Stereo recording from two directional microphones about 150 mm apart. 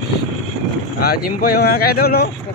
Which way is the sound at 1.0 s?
90° left.